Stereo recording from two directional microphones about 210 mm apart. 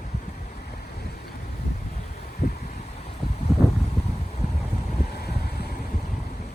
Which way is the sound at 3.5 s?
Centre (ahead or behind).